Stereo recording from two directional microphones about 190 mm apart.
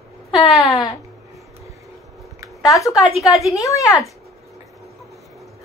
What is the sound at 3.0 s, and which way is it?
Speech, centre (ahead or behind).